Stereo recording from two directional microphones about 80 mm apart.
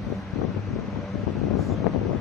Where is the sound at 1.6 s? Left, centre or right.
Centre.